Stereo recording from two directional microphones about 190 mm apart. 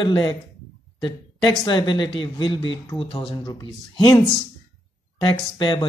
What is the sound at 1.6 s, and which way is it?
Speech, 20° left (ahead or behind).